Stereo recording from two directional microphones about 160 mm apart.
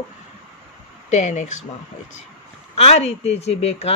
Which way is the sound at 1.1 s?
45° left (ahead or behind).